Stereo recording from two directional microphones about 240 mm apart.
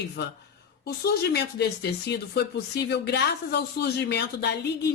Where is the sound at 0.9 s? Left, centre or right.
Left.